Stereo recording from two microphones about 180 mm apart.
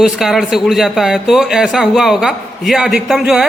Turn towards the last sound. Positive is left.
turn(degrees=-5)  # may be behind; listen again after turning